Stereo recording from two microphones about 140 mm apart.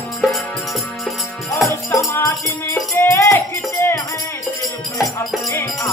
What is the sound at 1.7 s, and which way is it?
Music, 25° left (ahead or behind).